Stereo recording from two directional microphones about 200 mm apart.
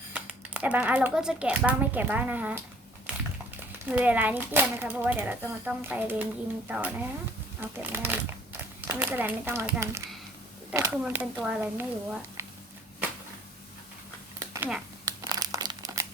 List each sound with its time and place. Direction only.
0.1 s speech: 5° right (ahead or behind)
3.7 s speech: 10° right (ahead or behind)
14.3 s a sound: 15° right (ahead or behind)
15.0 s crumpling: 20° right (ahead or behind)